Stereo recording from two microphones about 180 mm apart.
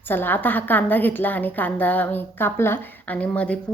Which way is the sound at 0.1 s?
10° left (ahead or behind).